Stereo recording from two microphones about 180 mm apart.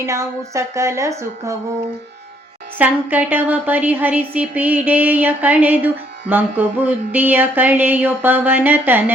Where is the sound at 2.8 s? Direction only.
10° right (ahead or behind).